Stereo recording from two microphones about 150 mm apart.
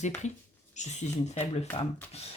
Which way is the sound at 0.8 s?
50° left (ahead or behind).